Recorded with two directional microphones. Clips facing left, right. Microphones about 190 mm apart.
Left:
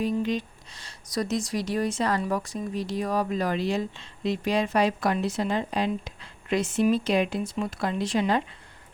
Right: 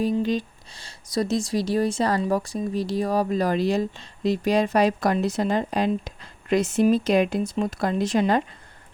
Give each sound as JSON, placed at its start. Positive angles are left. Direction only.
{"t": 0.0, "sound": "speech", "side_deg": -35}